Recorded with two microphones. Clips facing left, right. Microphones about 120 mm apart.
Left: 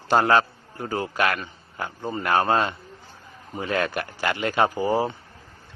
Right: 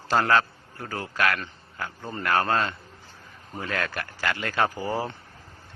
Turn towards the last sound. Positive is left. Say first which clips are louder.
# left 6 dB
turn(degrees=15)  # may be behind; listen again after turning